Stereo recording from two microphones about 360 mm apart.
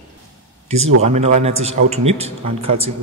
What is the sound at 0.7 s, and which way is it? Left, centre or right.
Speech, right.